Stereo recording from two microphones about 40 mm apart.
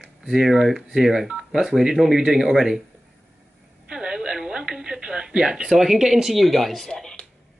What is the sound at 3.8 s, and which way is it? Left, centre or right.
A woman's voice, right.